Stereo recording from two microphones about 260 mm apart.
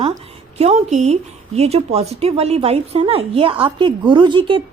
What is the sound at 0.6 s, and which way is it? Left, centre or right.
Speech, right.